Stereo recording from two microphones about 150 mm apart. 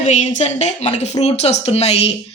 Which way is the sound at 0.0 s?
55° left (ahead or behind).